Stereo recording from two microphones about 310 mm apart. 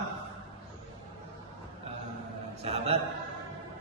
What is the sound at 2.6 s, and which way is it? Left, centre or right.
Speech, centre.